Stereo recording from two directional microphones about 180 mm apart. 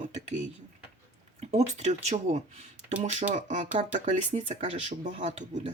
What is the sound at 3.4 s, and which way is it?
Speech, 40° right (ahead or behind).